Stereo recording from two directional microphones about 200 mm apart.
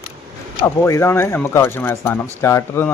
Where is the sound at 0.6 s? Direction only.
15° left (ahead or behind).